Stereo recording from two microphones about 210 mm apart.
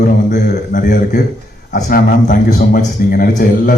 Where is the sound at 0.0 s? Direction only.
40° left (ahead or behind).